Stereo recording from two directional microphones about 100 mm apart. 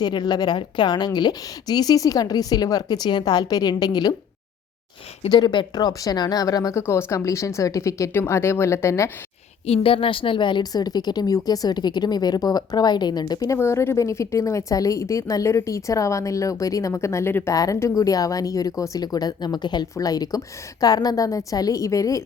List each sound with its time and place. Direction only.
0.0 s a woman's voice: 45° left (ahead or behind)
5.3 s a woman's voice: 45° left (ahead or behind); by 9.0 s 30° left (ahead or behind)
9.6 s a woman's voice: 80° left; by 13.6 s 40° left (ahead or behind)
13.6 s a woman's voice: 25° left (ahead or behind)
17.5 s a woman's voice: 35° left (ahead or behind)